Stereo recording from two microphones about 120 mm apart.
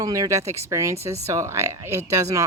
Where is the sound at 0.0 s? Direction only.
30° right (ahead or behind).